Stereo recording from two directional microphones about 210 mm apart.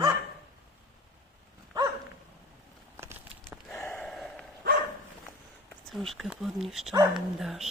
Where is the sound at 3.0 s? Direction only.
10° right (ahead or behind).